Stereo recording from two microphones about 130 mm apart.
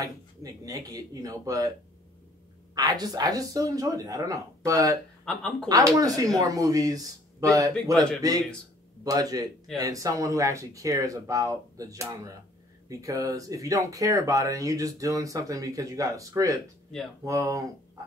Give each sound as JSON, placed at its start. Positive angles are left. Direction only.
{"t": 0.0, "sound": "speech", "side_deg": -30}
{"t": 2.7, "sound": "speech", "side_deg": -30}
{"t": 5.2, "sound": "speech", "side_deg": 5}
{"t": 5.7, "sound": "speech", "side_deg": -30}
{"t": 9.0, "sound": "speech", "side_deg": -30}